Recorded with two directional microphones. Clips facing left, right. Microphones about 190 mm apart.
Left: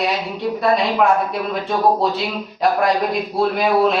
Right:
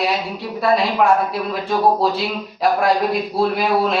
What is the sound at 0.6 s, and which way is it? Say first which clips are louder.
Speech: right 1 dB; centre (ahead or behind).